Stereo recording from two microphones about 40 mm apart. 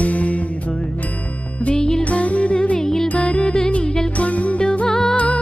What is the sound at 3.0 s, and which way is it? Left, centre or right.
Music, left.